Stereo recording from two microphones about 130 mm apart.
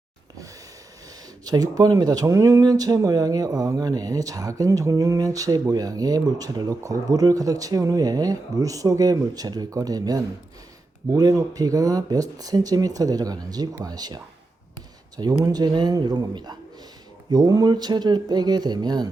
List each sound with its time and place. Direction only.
1.5 s speech: 30° right (ahead or behind)
15.4 s speech: 30° right (ahead or behind)